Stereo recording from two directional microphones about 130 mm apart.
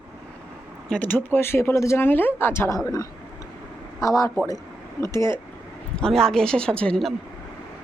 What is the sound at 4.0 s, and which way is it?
Speech, 25° left (ahead or behind).